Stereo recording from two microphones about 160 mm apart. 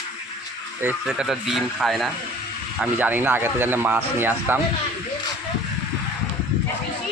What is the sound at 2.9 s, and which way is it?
Speech, 10° right (ahead or behind).